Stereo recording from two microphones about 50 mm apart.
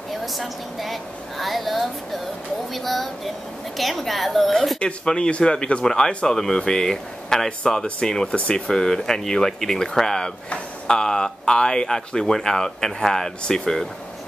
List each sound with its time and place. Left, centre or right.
0.2 s a woman's voice: centre
4.7 s speech: centre